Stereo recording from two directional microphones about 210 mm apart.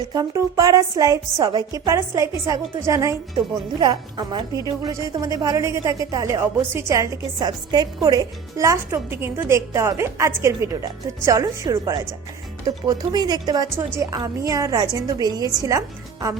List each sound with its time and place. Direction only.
0.1 s a woman's voice: 15° right (ahead or behind)